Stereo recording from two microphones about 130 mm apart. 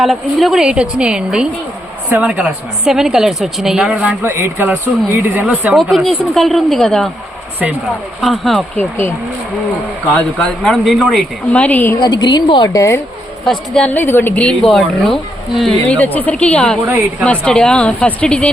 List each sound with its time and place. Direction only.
0.0 s a woman's voice: centre (ahead or behind)
4.2 s speech: 15° right (ahead or behind)
5.7 s a woman's voice: centre (ahead or behind)
8.2 s a woman's voice: centre (ahead or behind)
8.8 s speech: 20° left (ahead or behind)
10.2 s a woman's voice: 10° left (ahead or behind)
12.0 s speech: 35° left (ahead or behind)
13.4 s a woman's voice: 5° left (ahead or behind)
13.9 s a woman's voice: 15° left (ahead or behind)